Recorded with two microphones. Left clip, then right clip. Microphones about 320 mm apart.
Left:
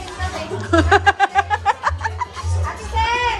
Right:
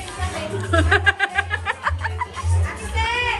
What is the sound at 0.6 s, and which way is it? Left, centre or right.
Speech, centre.